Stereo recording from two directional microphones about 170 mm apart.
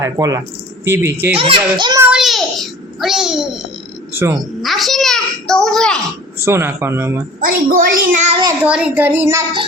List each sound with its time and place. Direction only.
0.0 s speech: 20° right (ahead or behind)
1.4 s a child's voice: 30° right (ahead or behind)
2.0 s child singing: 5° right (ahead or behind)
4.1 s speech: 15° right (ahead or behind)
4.6 s a child's voice: centre (ahead or behind)
6.4 s speech: 15° right (ahead or behind)
7.4 s a child's voice: 55° right (ahead or behind)
8.6 s speech: 5° right (ahead or behind)